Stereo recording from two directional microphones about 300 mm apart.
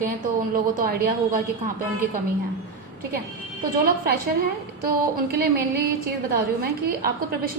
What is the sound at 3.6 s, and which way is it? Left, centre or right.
A woman's voice, right.